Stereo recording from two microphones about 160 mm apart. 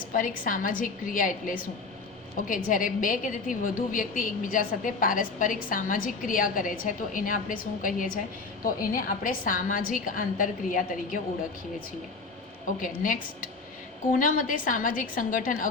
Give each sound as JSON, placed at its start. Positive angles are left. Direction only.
{"t": 0.1, "sound": "a woman's voice", "side_deg": 60}
{"t": 12.8, "sound": "a woman's voice", "side_deg": 60}
{"t": 14.2, "sound": "a woman's voice", "side_deg": 60}